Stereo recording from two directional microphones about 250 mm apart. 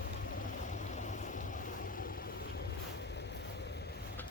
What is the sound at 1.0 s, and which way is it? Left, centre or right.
Boat, left.